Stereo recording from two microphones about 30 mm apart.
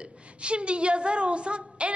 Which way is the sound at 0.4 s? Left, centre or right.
Right.